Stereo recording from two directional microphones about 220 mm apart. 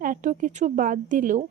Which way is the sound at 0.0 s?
35° right (ahead or behind).